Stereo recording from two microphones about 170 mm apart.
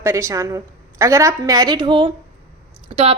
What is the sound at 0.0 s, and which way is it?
A woman's voice, 15° right (ahead or behind).